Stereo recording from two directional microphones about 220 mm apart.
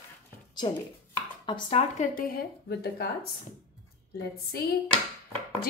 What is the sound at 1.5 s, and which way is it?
Speech, 25° left (ahead or behind).